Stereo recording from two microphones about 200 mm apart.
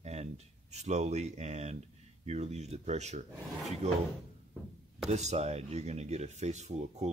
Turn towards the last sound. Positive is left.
turn(degrees=-35)  # may be behind; listen again after turning